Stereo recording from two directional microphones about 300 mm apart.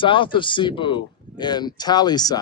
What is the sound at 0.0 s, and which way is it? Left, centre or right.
Speech, centre.